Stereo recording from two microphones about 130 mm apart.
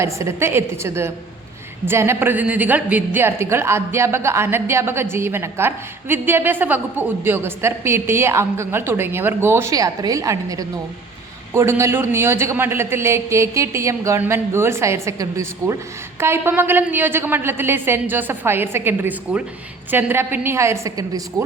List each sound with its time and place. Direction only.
0.0 s a woman's voice: 20° right (ahead or behind)